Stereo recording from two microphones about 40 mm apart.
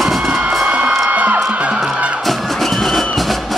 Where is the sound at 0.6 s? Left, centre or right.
Right.